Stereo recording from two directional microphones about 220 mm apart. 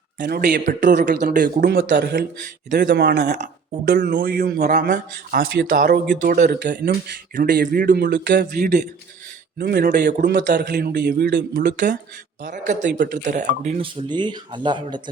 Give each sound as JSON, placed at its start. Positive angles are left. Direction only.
{"t": 0.2, "sound": "speech", "side_deg": -40}
{"t": 1.2, "sound": "a man's voice", "side_deg": -40}
{"t": 3.3, "sound": "a man's voice", "side_deg": -35}
{"t": 12.4, "sound": "speech", "side_deg": -35}